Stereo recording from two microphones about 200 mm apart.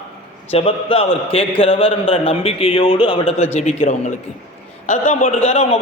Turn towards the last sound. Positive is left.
turn(degrees=35)  # may be behind; listen again after turning